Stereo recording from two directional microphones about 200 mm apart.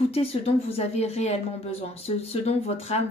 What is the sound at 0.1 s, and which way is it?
Speech, 30° left (ahead or behind).